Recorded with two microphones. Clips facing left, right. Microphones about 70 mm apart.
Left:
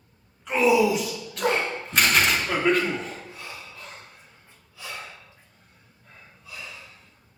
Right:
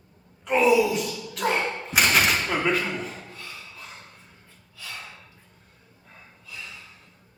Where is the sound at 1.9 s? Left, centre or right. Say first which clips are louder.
Even; centre.